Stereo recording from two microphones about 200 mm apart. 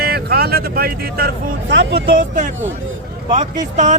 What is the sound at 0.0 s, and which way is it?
Speech, 50° right (ahead or behind).